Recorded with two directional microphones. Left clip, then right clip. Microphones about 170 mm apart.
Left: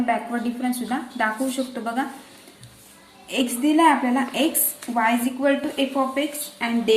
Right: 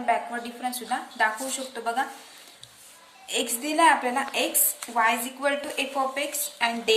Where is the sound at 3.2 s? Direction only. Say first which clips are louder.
Left 6 dB; 20° right (ahead or behind).